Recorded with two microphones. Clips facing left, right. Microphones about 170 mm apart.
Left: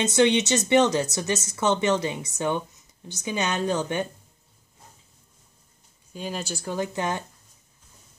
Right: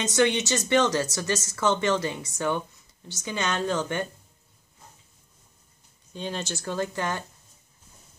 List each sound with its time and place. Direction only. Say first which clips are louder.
0.0 s speech: left 3 dB; 25° left (ahead or behind)
6.1 s speech: even; 5° left (ahead or behind)